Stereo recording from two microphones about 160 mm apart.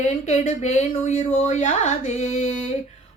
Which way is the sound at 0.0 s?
45° left (ahead or behind).